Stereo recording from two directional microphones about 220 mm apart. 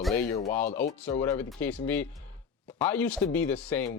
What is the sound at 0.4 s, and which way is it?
Speech, 10° left (ahead or behind).